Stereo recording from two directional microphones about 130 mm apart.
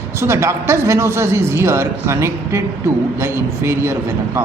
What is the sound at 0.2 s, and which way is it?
A man's voice, 20° right (ahead or behind).